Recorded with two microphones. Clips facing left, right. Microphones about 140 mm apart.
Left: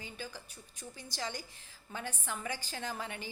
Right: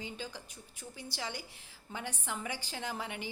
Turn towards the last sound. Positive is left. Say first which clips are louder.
# right 1 dB
turn(degrees=-15)  # may be behind; listen again after turning